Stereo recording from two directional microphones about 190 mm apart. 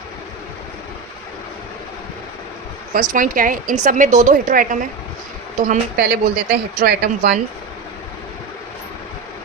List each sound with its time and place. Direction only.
2.9 s a woman's voice: 45° right (ahead or behind)